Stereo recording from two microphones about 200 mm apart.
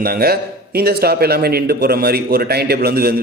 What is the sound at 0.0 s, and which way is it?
A man's voice, 50° right (ahead or behind).